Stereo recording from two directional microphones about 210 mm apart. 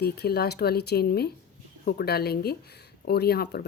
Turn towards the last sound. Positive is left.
turn(degrees=50)  # may be behind; listen again after turning